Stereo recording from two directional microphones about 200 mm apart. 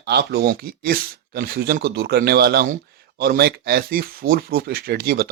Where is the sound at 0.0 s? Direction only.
55° right (ahead or behind).